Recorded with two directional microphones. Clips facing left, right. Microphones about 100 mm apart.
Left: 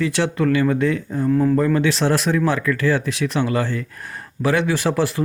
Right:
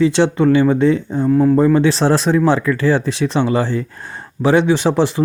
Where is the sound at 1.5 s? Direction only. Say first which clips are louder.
Right 5 dB; 25° right (ahead or behind).